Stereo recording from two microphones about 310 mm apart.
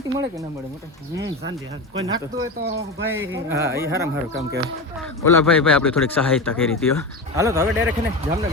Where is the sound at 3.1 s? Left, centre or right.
Centre.